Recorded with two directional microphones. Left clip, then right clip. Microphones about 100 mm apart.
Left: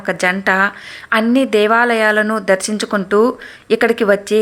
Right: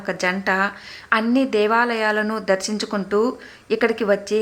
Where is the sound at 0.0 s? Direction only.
30° left (ahead or behind).